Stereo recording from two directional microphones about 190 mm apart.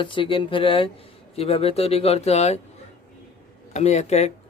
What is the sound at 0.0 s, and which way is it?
Speech, 25° left (ahead or behind).